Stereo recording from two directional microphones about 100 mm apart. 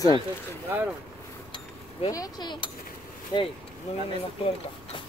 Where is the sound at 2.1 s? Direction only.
40° left (ahead or behind).